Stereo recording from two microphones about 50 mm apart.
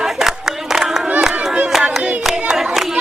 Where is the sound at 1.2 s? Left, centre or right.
Centre.